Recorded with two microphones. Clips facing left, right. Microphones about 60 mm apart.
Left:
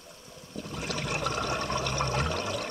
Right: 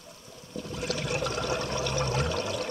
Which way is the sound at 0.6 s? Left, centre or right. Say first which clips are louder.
Right 2 dB; centre.